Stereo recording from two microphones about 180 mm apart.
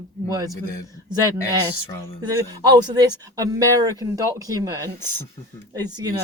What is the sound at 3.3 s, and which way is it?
Speech, 20° right (ahead or behind).